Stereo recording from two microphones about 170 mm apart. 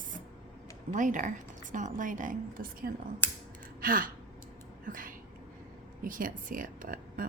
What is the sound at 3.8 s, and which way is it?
Gasp, 55° right (ahead or behind).